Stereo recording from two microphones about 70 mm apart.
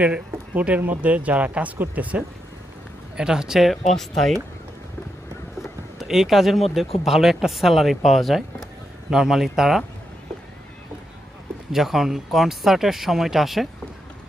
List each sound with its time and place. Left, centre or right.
0.0 s speech: centre
3.2 s speech: centre
6.0 s speech: centre
11.7 s speech: centre